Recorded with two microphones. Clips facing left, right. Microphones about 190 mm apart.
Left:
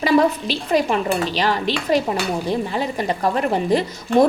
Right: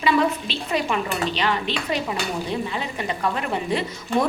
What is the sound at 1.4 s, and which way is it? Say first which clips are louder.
Speech: left 4 dB; 40° left (ahead or behind).